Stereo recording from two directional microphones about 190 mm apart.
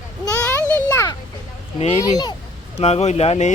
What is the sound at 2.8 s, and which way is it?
Speech, 35° left (ahead or behind).